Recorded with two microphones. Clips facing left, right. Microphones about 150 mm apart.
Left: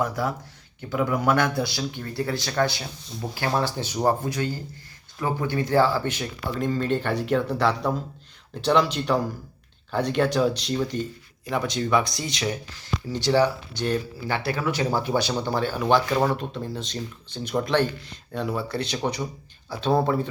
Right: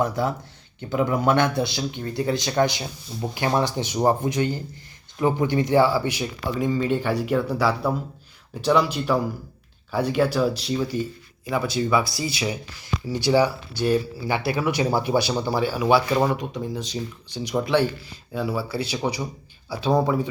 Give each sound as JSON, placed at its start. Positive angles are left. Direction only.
{"t": 0.0, "sound": "speech", "side_deg": -25}